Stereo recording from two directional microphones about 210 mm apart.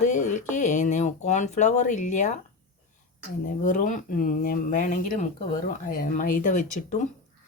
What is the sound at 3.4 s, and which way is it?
Speech, 40° left (ahead or behind).